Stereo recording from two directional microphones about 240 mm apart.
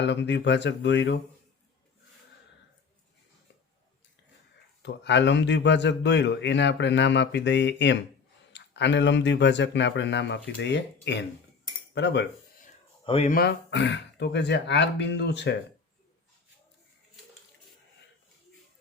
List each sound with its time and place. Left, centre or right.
0.0 s a man's voice: left
4.8 s a man's voice: left
13.1 s speech: left
13.3 s a man's voice: left